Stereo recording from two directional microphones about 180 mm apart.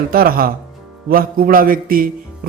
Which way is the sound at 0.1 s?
55° right (ahead or behind).